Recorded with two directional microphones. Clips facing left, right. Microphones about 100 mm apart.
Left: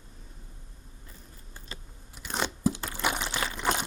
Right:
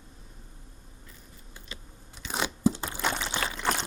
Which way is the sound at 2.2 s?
5° right (ahead or behind).